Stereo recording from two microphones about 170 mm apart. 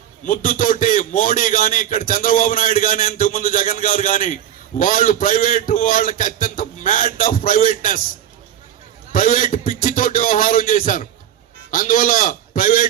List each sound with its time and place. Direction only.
0.3 s a man's voice: 50° left (ahead or behind)
9.1 s a man's voice: 55° left (ahead or behind)